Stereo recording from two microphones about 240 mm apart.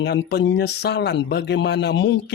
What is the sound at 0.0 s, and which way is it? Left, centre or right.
Speech, left.